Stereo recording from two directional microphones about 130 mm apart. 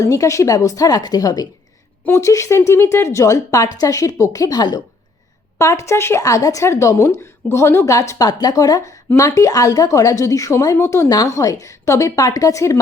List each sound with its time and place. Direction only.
0.0 s speech: 25° left (ahead or behind)